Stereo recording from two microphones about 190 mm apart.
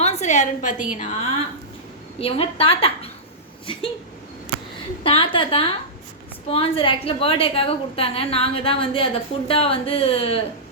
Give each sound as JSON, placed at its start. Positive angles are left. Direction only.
{"t": 0.0, "sound": "a woman's voice", "side_deg": 35}
{"t": 5.0, "sound": "a woman's voice", "side_deg": 30}